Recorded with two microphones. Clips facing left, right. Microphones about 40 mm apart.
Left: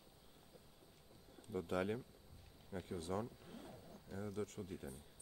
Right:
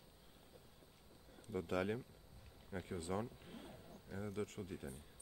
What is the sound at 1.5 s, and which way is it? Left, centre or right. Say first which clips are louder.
Speech: even; centre.